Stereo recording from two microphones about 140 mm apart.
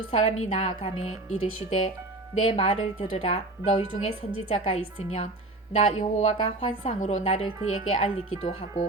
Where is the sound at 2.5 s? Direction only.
45° left (ahead or behind).